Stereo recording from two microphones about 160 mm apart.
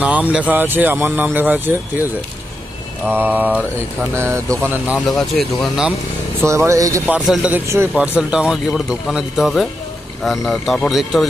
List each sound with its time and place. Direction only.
0.0 s speech: 10° right (ahead or behind)
3.1 s speech: 10° right (ahead or behind)
4.9 s speech: centre (ahead or behind)
6.4 s speech: 15° right (ahead or behind)
7.1 s speech: 5° right (ahead or behind)